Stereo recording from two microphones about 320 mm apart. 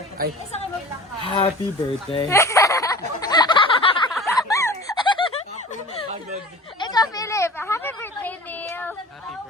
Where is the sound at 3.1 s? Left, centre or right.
Centre.